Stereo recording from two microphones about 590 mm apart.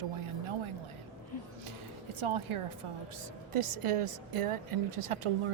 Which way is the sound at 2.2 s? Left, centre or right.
Right.